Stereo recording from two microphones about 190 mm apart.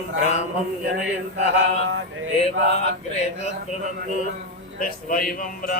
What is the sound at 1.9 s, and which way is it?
Male singing, 85° right.